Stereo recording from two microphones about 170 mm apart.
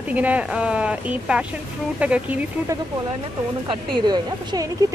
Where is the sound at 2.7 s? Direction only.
20° right (ahead or behind).